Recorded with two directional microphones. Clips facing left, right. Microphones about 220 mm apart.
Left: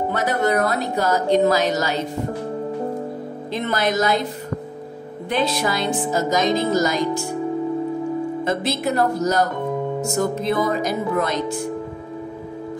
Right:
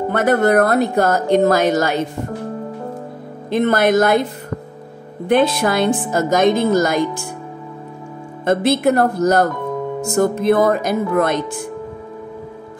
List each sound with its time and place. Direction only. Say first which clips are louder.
0.1 s speech: right 8 dB; 55° right (ahead or behind)
3.4 s a woman's voice: right 8 dB; 55° right (ahead or behind)
5.3 s a woman's voice: right 7 dB; 55° right (ahead or behind)
8.5 s a woman's voice: right 11 dB; 55° right (ahead or behind)